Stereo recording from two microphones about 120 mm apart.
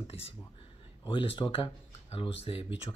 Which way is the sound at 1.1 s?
45° left (ahead or behind).